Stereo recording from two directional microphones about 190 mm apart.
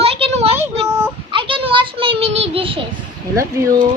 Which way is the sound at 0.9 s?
15° right (ahead or behind).